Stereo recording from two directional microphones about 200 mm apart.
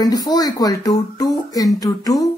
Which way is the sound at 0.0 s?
20° left (ahead or behind).